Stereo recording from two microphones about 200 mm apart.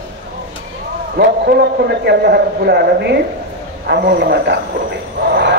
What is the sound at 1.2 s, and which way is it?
A man's voice, 55° right (ahead or behind).